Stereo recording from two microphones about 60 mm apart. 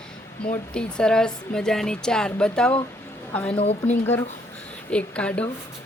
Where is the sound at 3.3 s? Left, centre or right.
Left.